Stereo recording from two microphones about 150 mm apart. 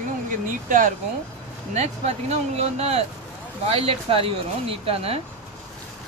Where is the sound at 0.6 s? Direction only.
65° right (ahead or behind).